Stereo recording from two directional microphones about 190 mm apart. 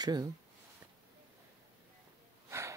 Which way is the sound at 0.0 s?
20° right (ahead or behind).